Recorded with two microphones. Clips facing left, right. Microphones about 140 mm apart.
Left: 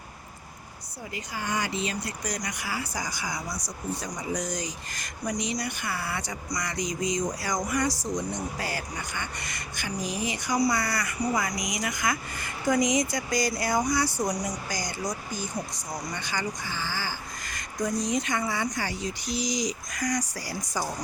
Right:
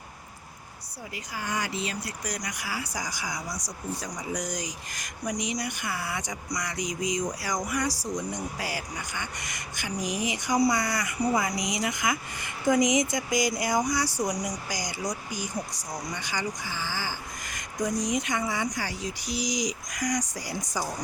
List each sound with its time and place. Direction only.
1.1 s speech: 5° right (ahead or behind)